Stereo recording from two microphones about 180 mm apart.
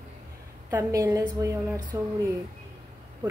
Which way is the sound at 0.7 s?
15° right (ahead or behind).